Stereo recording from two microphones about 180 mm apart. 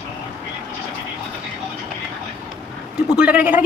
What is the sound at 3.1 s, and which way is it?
Speech, 5° right (ahead or behind).